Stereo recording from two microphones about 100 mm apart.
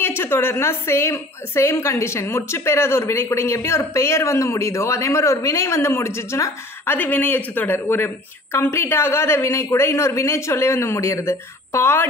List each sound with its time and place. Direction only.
0.2 s a woman's voice: 25° left (ahead or behind)
7.0 s a woman's voice: 20° left (ahead or behind)